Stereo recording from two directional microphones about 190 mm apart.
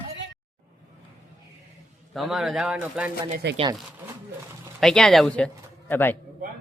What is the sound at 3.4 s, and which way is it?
Speech, 65° right (ahead or behind).